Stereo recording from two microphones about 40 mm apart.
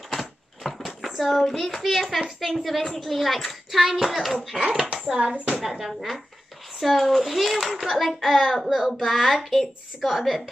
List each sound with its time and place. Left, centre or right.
0.1 s a sound: centre
1.4 s a child's voice: centre
2.8 s a child's voice: centre
4.6 s a child's voice: centre